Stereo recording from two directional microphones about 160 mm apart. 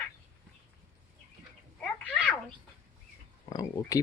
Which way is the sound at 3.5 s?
25° left (ahead or behind).